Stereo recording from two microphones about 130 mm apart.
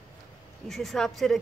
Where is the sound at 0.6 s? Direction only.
Centre (ahead or behind).